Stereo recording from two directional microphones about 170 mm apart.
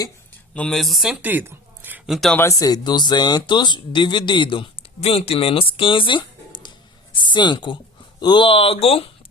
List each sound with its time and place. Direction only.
0.5 s speech: 5° left (ahead or behind)
2.4 s speech: 20° left (ahead or behind)